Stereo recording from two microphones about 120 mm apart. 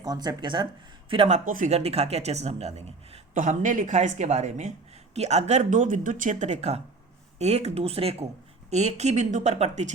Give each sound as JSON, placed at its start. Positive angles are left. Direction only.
{"t": 0.0, "sound": "speech", "side_deg": -35}
{"t": 1.3, "sound": "speech", "side_deg": -80}
{"t": 3.3, "sound": "speech", "side_deg": -90}